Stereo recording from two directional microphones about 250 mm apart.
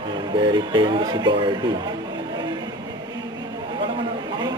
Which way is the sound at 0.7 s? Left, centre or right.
Centre.